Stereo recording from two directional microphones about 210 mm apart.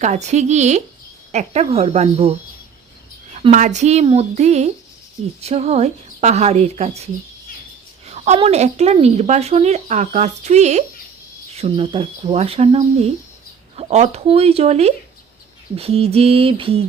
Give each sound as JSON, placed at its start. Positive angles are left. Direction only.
{"t": 0.0, "sound": "speech", "side_deg": -35}
{"t": 3.4, "sound": "speech", "side_deg": -35}